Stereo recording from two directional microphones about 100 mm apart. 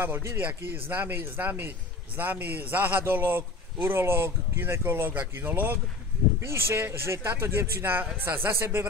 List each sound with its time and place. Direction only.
0.0 s a man's voice: 25° right (ahead or behind)